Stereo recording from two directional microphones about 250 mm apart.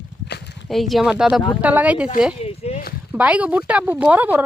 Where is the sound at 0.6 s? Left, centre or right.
Centre.